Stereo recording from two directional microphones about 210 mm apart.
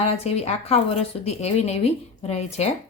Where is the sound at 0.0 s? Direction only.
30° left (ahead or behind).